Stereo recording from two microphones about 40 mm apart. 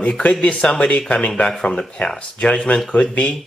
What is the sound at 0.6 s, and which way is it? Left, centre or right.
Speech, left.